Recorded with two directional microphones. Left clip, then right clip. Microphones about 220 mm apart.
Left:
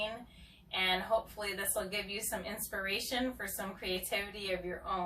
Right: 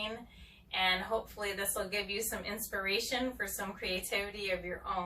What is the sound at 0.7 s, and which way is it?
A woman's voice, centre (ahead or behind).